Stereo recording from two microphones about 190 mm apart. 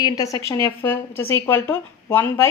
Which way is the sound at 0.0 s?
20° left (ahead or behind).